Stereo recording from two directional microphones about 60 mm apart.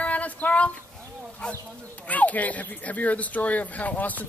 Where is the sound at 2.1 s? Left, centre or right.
Left.